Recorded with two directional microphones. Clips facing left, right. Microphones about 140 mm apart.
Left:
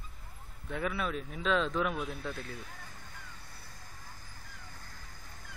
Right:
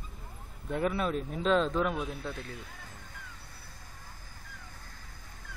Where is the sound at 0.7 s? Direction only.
35° right (ahead or behind).